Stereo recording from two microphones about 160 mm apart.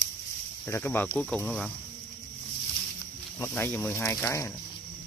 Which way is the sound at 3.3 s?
15° left (ahead or behind).